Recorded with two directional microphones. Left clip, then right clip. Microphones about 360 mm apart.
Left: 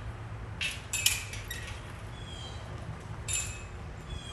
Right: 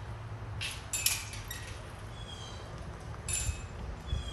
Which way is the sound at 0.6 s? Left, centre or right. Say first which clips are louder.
Left 5 dB; centre.